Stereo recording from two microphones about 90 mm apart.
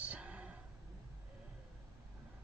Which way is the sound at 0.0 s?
15° right (ahead or behind).